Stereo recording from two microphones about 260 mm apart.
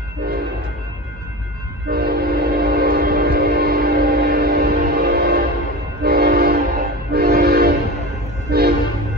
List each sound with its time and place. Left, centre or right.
0.2 s train: right
1.9 s train: right